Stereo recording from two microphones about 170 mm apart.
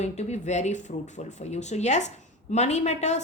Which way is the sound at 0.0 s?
40° left (ahead or behind).